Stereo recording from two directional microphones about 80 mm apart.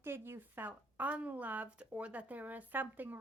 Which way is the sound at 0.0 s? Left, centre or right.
Right.